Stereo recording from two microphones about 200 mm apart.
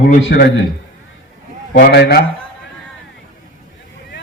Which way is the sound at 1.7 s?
55° left (ahead or behind).